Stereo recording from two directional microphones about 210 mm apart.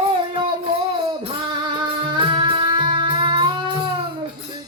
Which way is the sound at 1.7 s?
20° right (ahead or behind).